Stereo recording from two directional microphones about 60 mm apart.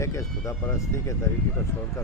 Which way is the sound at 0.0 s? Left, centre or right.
Left.